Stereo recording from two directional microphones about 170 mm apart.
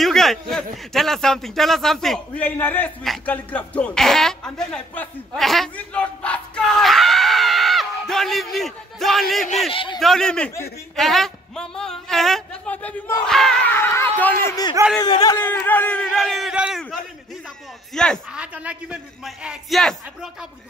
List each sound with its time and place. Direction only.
0.0 s a man's voice: centre (ahead or behind)
9.7 s a man's voice: 30° left (ahead or behind)
9.9 s a man's voice: centre (ahead or behind)
14.5 s speech: 25° left (ahead or behind)
15.3 s a man's voice: 10° left (ahead or behind)